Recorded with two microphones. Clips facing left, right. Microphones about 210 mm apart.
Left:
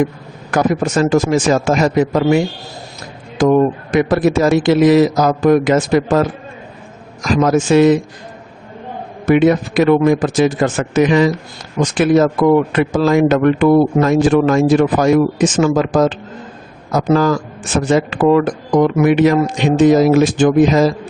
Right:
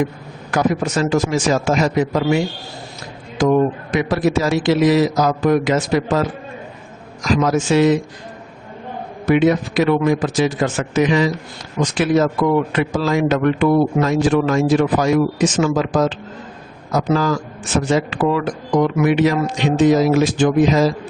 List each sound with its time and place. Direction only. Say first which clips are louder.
0.5 s speech: left 3 dB; 50° left (ahead or behind)
3.4 s speech: left 3 dB; 50° left (ahead or behind)
7.3 s speech: left 4 dB; 50° left (ahead or behind)
9.2 s speech: left 3 dB; 50° left (ahead or behind)